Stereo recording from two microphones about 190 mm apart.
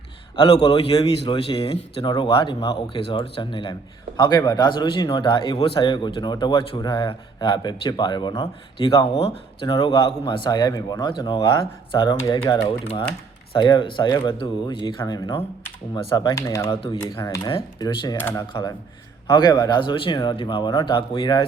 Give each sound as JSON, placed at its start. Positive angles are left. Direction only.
{"t": 0.3, "sound": "speech", "side_deg": 25}
{"t": 19.3, "sound": "speech", "side_deg": 20}